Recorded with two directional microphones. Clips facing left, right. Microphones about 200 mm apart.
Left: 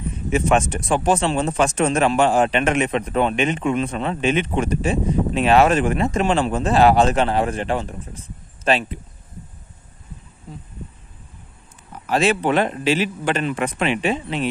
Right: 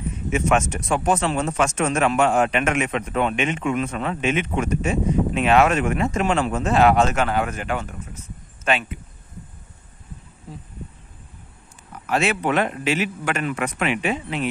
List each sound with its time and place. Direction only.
0.3 s speech: 30° left (ahead or behind)
11.9 s speech: 30° left (ahead or behind)